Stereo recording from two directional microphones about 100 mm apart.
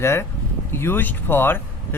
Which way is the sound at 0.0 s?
25° left (ahead or behind).